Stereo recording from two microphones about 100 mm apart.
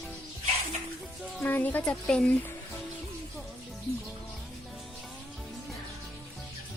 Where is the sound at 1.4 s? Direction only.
15° left (ahead or behind).